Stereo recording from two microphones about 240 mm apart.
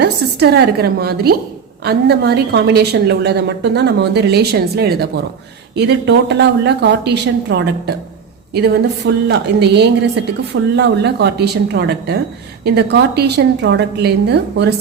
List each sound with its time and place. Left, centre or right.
0.0 s a woman's voice: right